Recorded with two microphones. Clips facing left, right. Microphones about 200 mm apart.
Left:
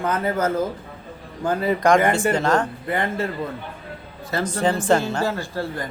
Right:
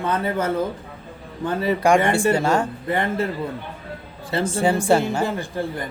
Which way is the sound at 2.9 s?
30° right (ahead or behind).